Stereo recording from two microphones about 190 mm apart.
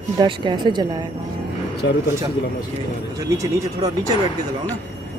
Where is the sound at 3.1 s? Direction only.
20° right (ahead or behind).